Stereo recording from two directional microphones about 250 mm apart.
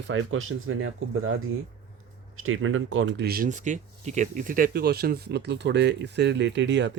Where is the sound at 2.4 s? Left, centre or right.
Right.